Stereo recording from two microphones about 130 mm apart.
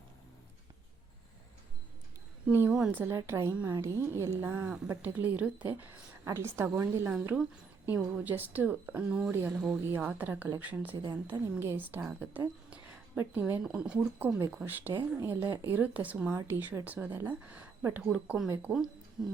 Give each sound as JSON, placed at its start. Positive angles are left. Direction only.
{"t": 2.5, "sound": "a woman's voice", "side_deg": -15}
{"t": 9.5, "sound": "speech", "side_deg": 5}
{"t": 9.8, "sound": "speech", "side_deg": -10}